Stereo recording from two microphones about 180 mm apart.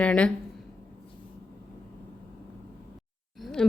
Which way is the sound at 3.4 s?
5° left (ahead or behind).